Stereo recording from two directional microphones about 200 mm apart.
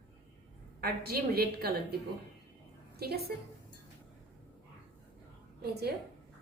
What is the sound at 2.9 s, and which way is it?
Speech, 50° right (ahead or behind).